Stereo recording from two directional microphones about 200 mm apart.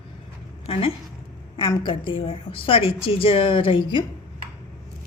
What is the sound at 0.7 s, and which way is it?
A woman's voice, 30° left (ahead or behind).